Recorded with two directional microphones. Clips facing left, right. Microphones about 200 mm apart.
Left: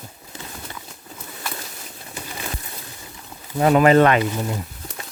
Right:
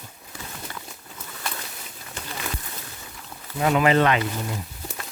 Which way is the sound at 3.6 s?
40° left (ahead or behind).